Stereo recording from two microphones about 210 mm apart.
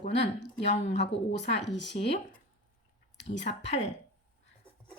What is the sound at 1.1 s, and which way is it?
Speech, 30° left (ahead or behind).